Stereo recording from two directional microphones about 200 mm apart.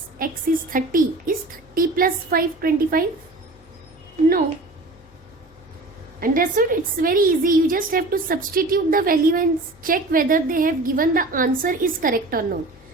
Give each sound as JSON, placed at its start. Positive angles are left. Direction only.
{"t": 0.2, "sound": "a woman's voice", "side_deg": -45}
{"t": 6.1, "sound": "a woman's voice", "side_deg": -45}